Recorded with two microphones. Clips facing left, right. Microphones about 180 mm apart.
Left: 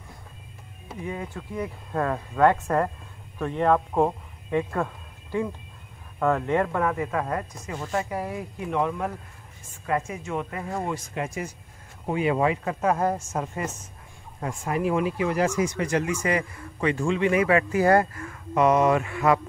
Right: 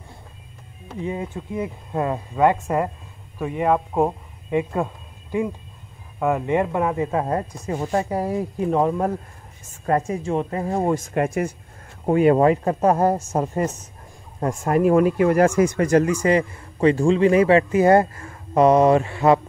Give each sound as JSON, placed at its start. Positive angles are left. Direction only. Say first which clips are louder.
{"t": 1.0, "sound": "speech", "louder": "right 5 dB", "side_deg": -20}